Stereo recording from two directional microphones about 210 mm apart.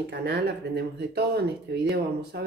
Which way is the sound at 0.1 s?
50° right (ahead or behind).